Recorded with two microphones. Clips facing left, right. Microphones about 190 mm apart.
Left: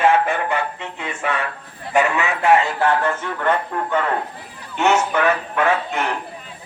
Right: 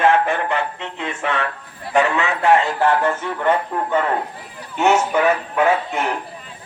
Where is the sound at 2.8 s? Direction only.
10° right (ahead or behind).